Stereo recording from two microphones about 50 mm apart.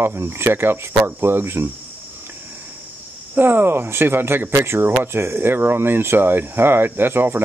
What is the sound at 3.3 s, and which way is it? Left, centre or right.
Speech, right.